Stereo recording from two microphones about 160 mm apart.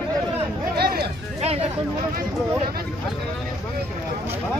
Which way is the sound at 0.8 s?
75° right (ahead or behind).